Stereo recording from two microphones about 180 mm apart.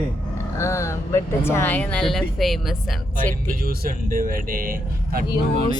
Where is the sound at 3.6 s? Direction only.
55° right (ahead or behind).